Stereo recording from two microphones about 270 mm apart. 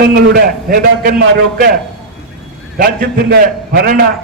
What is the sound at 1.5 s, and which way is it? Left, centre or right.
Speech, right.